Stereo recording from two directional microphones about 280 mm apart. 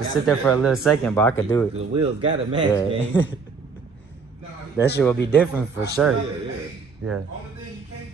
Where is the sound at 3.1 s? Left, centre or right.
Centre.